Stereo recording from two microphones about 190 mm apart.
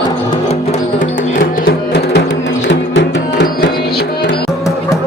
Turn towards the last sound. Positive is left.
turn(degrees=70)  # may be behind; listen again after turning